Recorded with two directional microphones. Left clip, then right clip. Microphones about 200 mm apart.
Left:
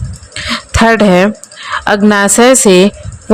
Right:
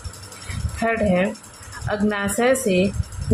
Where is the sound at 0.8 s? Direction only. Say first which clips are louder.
Left 12 dB; 60° left (ahead or behind).